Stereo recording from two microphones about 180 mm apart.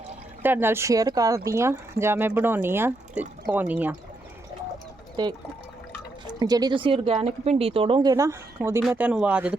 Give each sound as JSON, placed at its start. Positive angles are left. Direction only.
{"t": 0.4, "sound": "speech", "side_deg": -10}
{"t": 5.2, "sound": "speech", "side_deg": -25}
{"t": 6.4, "sound": "speech", "side_deg": -25}